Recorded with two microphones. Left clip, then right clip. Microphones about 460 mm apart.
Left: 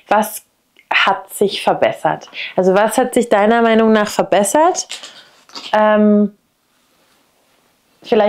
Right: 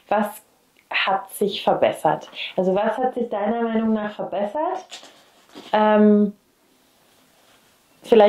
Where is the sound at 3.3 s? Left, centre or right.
Left.